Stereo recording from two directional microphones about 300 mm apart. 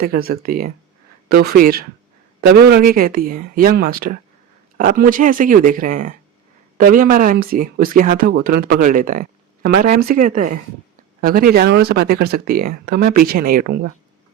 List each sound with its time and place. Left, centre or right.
0.3 s speech: right